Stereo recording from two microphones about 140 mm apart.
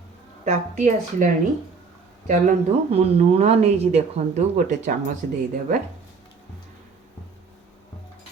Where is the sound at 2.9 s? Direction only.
50° right (ahead or behind).